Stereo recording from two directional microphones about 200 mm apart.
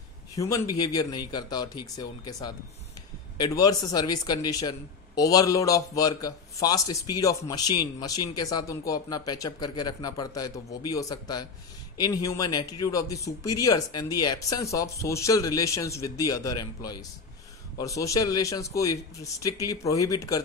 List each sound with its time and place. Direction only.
0.4 s speech: 20° left (ahead or behind)